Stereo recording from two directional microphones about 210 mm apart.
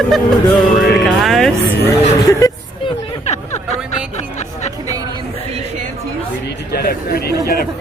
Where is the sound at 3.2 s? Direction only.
30° left (ahead or behind).